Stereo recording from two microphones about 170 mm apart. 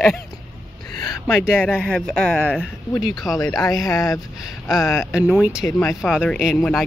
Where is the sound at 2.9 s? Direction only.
20° left (ahead or behind).